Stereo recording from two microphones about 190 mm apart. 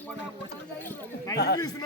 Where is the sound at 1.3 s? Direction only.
20° left (ahead or behind).